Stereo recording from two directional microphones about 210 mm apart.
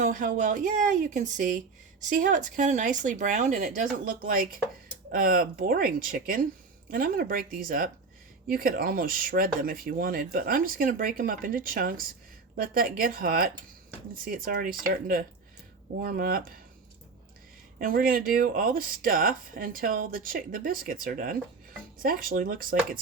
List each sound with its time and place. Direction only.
0.0 s speech: 35° right (ahead or behind)
16.0 s speech: 45° right (ahead or behind)
17.7 s speech: 40° right (ahead or behind)